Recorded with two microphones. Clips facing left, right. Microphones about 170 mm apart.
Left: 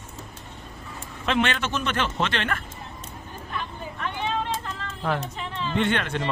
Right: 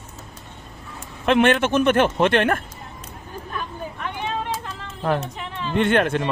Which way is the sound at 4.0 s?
15° right (ahead or behind).